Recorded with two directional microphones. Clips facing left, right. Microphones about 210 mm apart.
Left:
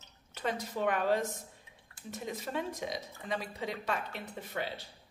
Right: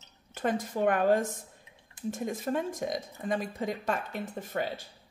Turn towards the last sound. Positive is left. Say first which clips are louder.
# right 5 dB
turn(degrees=-45)  # may be behind; listen again after turning